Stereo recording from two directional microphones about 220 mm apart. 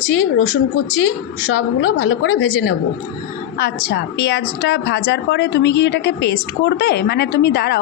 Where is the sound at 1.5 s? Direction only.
75° left (ahead or behind).